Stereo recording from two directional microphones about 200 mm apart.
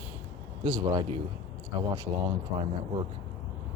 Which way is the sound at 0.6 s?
20° right (ahead or behind).